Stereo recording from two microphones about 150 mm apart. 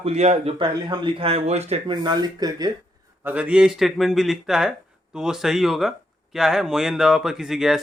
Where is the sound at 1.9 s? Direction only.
30° right (ahead or behind).